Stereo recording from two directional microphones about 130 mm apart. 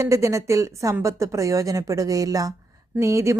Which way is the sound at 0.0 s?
25° right (ahead or behind).